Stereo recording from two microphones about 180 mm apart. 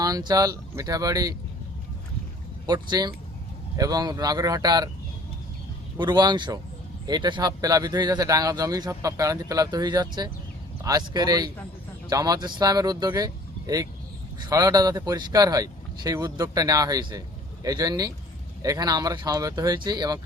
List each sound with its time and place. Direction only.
0.0 s speech: 20° right (ahead or behind)
2.6 s speech: 25° right (ahead or behind)
6.0 s speech: 25° right (ahead or behind)